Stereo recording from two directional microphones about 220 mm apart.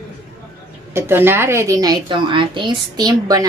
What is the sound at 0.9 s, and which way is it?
A woman's voice, 10° right (ahead or behind).